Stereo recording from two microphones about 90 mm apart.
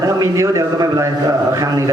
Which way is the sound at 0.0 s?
40° right (ahead or behind).